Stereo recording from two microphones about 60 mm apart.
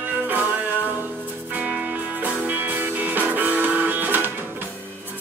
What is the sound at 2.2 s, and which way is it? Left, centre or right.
Music, right.